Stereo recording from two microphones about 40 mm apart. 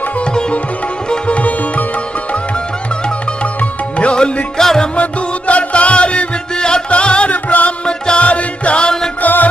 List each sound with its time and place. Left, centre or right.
1.2 s sitar: left
4.0 s music: left
4.6 s music: centre
5.5 s music: left
7.8 s music: left
9.2 s mantra: left